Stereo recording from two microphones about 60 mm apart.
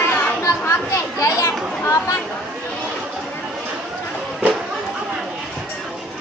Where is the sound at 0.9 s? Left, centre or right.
Left.